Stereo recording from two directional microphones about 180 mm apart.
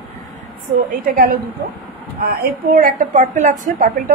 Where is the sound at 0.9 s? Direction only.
50° right (ahead or behind).